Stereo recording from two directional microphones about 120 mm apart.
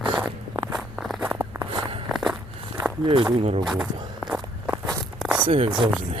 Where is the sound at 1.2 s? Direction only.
15° right (ahead or behind).